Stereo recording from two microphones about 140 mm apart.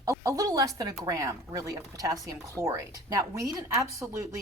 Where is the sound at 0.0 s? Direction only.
20° right (ahead or behind).